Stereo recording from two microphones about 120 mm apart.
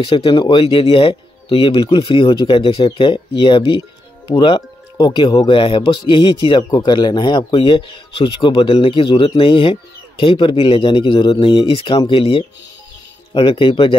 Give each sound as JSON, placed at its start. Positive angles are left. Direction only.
{"t": 0.0, "sound": "speech", "side_deg": 50}